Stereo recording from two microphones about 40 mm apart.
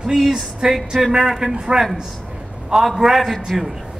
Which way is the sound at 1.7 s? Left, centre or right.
Right.